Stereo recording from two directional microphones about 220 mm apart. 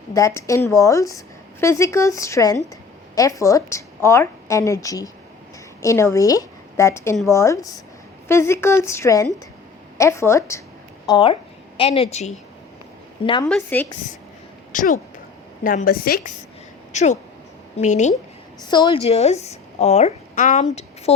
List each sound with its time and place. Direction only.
0.1 s a woman's voice: 15° left (ahead or behind)
13.5 s a woman's voice: 10° left (ahead or behind)
14.7 s a woman's voice: 35° left (ahead or behind)
16.9 s a woman's voice: 30° left (ahead or behind)
18.6 s a woman's voice: 20° left (ahead or behind); by 20.7 s 35° left (ahead or behind)